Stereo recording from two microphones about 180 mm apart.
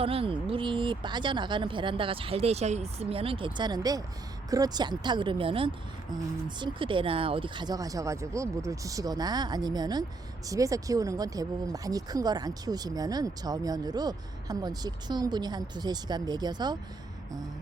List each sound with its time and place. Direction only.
0.0 s speech: 30° right (ahead or behind)